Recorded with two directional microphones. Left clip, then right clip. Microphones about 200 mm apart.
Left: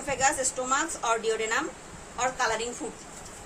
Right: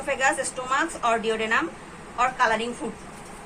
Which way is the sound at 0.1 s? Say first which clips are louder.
Right 3 dB; 70° left (ahead or behind).